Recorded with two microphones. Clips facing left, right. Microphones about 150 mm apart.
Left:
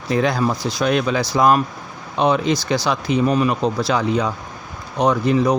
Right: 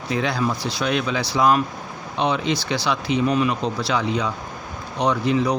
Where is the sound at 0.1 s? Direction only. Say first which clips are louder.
Left 4 dB; 45° left (ahead or behind).